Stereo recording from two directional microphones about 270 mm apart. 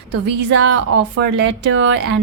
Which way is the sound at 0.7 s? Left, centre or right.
Right.